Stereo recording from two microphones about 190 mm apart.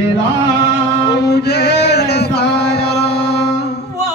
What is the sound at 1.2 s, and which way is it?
Mantra, 60° left (ahead or behind).